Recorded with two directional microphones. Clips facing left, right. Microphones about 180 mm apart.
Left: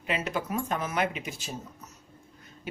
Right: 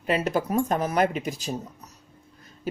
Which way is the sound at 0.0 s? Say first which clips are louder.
Right 6 dB; 40° right (ahead or behind).